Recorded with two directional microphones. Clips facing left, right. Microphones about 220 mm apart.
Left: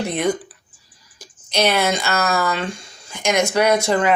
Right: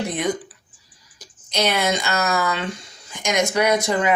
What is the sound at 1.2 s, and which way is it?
Speech, 20° right (ahead or behind).